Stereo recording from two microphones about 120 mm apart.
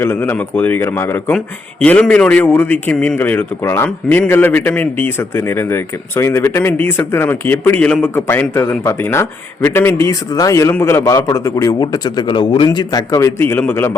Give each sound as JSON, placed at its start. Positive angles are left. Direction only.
{"t": 0.0, "sound": "a man's voice", "side_deg": 20}
{"t": 1.8, "sound": "a man's voice", "side_deg": 10}